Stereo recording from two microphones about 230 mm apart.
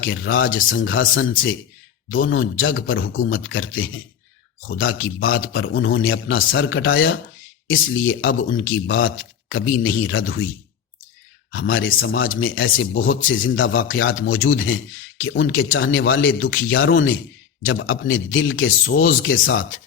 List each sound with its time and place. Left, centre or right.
0.0 s speech: left
11.5 s speech: left